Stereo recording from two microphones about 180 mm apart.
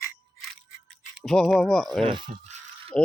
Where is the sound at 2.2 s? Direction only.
50° right (ahead or behind).